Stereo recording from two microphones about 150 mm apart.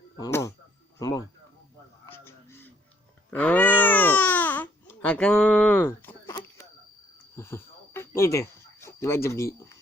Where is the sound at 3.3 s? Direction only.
10° left (ahead or behind).